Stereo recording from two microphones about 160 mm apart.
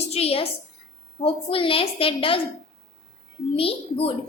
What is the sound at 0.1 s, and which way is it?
A woman's voice, 40° left (ahead or behind).